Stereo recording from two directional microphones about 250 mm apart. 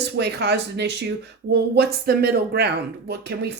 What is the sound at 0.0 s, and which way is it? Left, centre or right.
Speech, right.